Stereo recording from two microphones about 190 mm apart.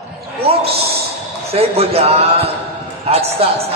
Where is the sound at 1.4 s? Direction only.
30° right (ahead or behind).